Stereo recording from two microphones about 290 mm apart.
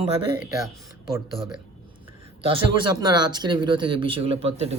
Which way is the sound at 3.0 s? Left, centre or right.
Centre.